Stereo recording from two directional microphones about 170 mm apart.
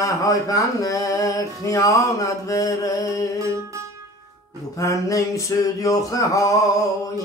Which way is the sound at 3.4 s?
20° right (ahead or behind).